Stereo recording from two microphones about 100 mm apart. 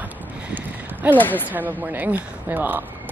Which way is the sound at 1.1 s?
20° left (ahead or behind).